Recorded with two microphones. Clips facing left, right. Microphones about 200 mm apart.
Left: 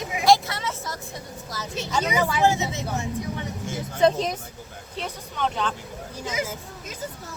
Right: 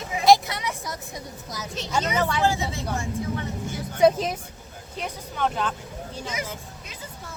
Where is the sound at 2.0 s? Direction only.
10° left (ahead or behind).